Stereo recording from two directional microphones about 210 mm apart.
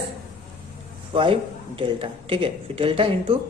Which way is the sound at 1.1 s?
25° right (ahead or behind).